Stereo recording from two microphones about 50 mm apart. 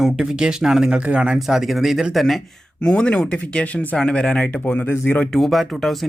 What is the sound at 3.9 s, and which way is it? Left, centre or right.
Speech, centre.